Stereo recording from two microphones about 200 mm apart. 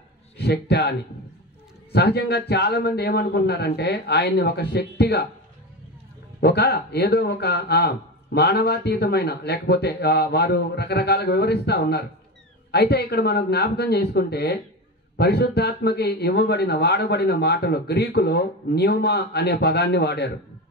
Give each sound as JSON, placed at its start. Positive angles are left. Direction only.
{"t": 0.4, "sound": "a man's voice", "side_deg": 55}
{"t": 6.4, "sound": "a man's voice", "side_deg": 55}